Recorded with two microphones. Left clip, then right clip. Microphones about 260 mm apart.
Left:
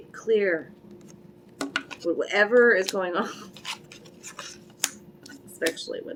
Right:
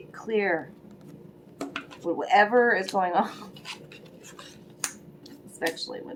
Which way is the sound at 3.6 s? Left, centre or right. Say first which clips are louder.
Left 7 dB; left.